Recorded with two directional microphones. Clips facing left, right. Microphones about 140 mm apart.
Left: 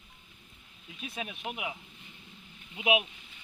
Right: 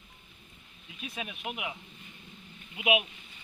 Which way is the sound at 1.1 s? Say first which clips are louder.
Left 1 dB; 30° left (ahead or behind).